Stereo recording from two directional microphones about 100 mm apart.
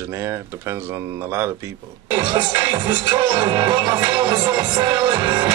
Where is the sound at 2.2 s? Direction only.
45° right (ahead or behind).